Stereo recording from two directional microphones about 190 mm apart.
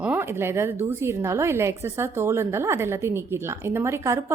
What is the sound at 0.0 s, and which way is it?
A woman's voice, 10° right (ahead or behind).